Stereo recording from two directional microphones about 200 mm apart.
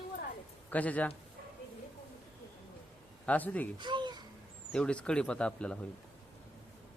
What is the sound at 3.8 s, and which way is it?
Speech, 20° right (ahead or behind).